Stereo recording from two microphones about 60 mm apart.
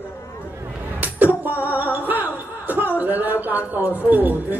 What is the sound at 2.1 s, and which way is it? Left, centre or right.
Chuckle, right.